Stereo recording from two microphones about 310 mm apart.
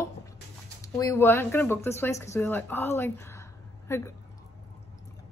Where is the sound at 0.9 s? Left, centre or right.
Centre.